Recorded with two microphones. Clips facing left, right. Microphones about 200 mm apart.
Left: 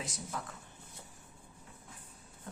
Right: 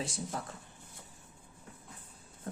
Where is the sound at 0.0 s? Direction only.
30° right (ahead or behind).